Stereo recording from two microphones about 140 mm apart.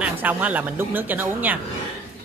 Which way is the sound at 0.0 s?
10° right (ahead or behind).